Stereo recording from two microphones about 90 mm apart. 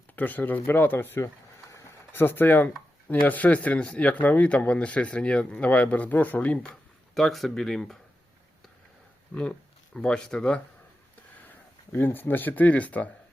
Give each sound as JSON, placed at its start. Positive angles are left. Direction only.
{"t": 0.2, "sound": "speech", "side_deg": 20}
{"t": 1.7, "sound": "a sound", "side_deg": 25}
{"t": 3.1, "sound": "speech", "side_deg": 20}
{"t": 9.3, "sound": "speech", "side_deg": 15}
{"t": 11.4, "sound": "speech", "side_deg": 25}